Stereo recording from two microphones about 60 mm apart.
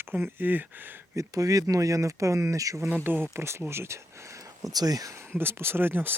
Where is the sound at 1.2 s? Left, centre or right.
Right.